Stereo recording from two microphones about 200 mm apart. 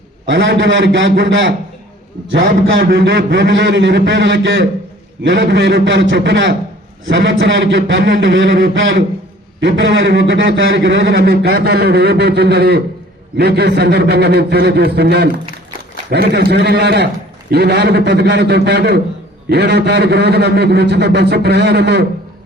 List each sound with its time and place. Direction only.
0.3 s a man's voice: 70° right (ahead or behind)
2.8 s a man's voice: 55° right (ahead or behind)